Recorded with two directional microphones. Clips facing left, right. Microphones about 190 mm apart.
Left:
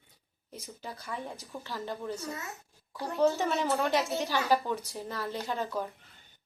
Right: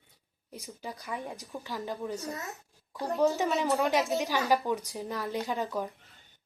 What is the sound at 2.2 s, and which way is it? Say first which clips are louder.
Speech: right 1 dB; 35° right (ahead or behind).